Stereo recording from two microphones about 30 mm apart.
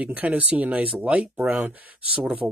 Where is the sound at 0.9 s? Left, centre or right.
Right.